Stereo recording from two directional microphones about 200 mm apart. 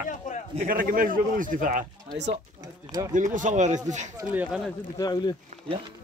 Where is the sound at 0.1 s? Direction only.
40° left (ahead or behind).